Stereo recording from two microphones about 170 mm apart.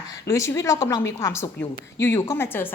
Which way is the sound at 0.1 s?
20° left (ahead or behind).